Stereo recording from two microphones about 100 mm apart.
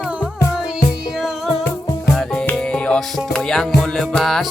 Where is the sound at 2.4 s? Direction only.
10° left (ahead or behind).